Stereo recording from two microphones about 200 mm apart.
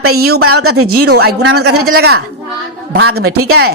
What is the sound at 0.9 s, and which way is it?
Speech, 55° right (ahead or behind).